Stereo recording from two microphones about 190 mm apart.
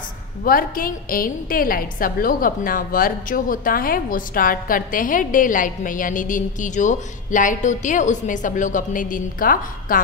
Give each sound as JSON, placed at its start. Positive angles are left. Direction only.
{"t": 0.4, "sound": "a woman's voice", "side_deg": 50}